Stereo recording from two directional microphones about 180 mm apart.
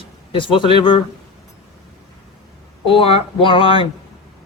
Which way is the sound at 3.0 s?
30° left (ahead or behind).